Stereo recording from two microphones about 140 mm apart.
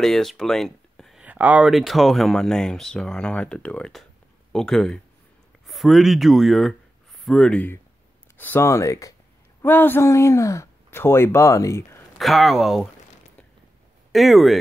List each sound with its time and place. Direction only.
0.0 s speech: 5° left (ahead or behind)
1.2 s a sound: 10° right (ahead or behind)
1.7 s speech: centre (ahead or behind); by 12.0 s 20° left (ahead or behind)
12.2 s speech: centre (ahead or behind)
14.1 s speech: centre (ahead or behind)